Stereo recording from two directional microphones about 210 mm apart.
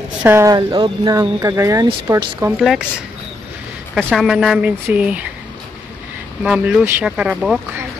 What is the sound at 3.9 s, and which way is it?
Speech, centre (ahead or behind).